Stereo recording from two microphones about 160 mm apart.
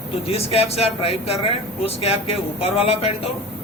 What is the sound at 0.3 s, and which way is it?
Speech, 40° left (ahead or behind).